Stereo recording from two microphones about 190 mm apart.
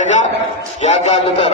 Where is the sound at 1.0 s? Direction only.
30° left (ahead or behind).